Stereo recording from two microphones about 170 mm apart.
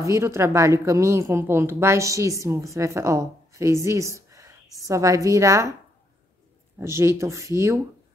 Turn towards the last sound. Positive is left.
turn(degrees=-15)  # may be behind; listen again after turning